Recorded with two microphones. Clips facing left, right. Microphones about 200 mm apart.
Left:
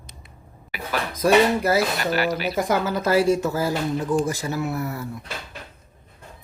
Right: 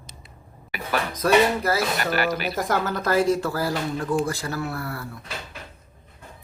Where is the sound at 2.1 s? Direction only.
50° right (ahead or behind).